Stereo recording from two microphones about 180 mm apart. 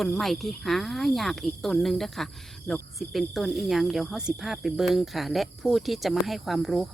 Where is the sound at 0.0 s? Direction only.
Centre (ahead or behind).